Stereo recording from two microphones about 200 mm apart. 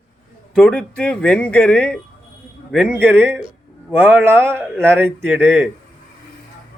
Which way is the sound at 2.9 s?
10° right (ahead or behind).